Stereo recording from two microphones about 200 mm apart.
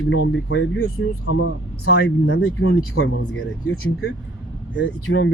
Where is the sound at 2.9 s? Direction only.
80° left.